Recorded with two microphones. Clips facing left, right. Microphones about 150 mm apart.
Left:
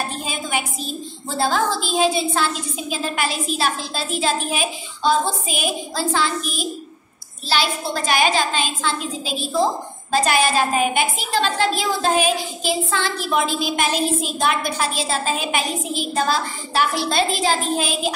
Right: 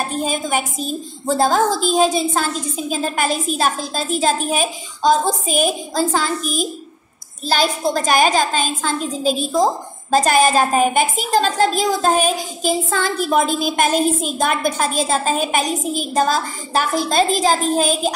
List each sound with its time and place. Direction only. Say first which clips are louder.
0.1 s a woman's voice: right 5 dB; 45° right (ahead or behind)